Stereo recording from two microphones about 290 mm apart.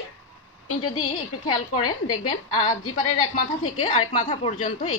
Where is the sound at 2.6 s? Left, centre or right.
Left.